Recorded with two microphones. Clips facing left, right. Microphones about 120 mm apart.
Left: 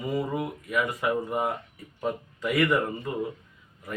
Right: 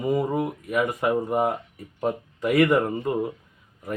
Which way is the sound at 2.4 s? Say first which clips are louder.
Right 6 dB; 50° right (ahead or behind).